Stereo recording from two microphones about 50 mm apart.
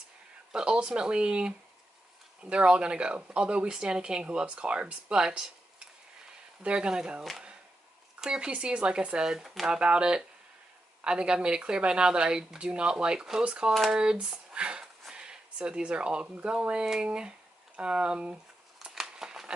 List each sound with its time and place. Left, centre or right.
0.5 s speech: centre
6.6 s speech: centre
18.9 s a sound: centre